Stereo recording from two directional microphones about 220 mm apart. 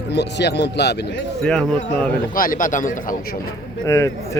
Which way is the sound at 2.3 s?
40° left (ahead or behind).